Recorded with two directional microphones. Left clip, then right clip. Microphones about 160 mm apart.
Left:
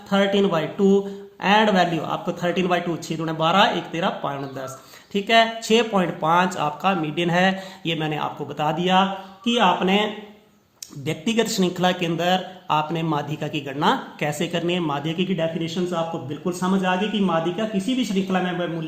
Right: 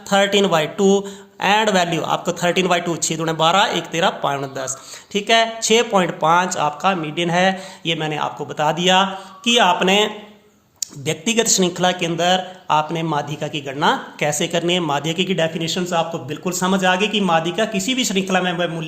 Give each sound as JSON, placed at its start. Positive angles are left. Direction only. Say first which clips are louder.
{"t": 0.1, "sound": "speech", "louder": "right 5 dB", "side_deg": -40}
{"t": 5.1, "sound": "speech", "louder": "right 2 dB", "side_deg": -15}